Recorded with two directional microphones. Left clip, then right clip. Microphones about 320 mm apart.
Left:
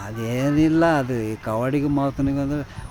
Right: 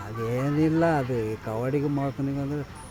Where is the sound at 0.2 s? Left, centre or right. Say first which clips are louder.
Left 5 dB; left.